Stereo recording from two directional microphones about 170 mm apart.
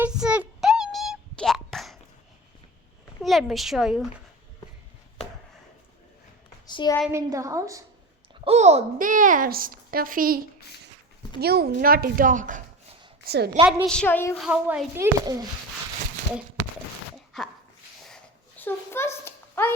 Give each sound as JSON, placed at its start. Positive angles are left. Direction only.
{"t": 0.0, "sound": "a sound", "side_deg": -5}
{"t": 3.2, "sound": "a woman's voice", "side_deg": 0}
{"t": 6.7, "sound": "a sound", "side_deg": 25}
{"t": 7.1, "sound": "a woman's voice", "side_deg": -15}
{"t": 8.4, "sound": "a child's voice", "side_deg": -40}
{"t": 11.3, "sound": "a woman's voice", "side_deg": -65}
{"t": 13.2, "sound": "a woman's voice", "side_deg": -70}
{"t": 13.8, "sound": "a woman's voice", "side_deg": 5}
{"t": 14.3, "sound": "speech", "side_deg": -5}
{"t": 17.3, "sound": "dog", "side_deg": 0}
{"t": 18.6, "sound": "a sound", "side_deg": 15}